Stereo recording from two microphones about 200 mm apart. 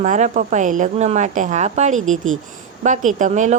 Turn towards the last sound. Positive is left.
turn(degrees=-35)  # may be behind; listen again after turning